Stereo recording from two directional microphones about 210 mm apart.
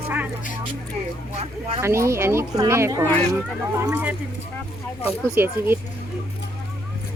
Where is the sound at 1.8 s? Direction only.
15° right (ahead or behind).